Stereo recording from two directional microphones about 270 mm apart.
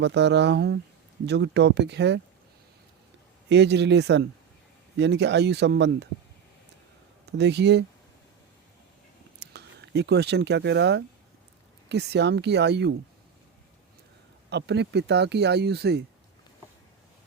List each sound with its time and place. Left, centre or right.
0.0 s speech: right
3.5 s speech: right
7.3 s speech: right
9.4 s speech: right
14.5 s speech: right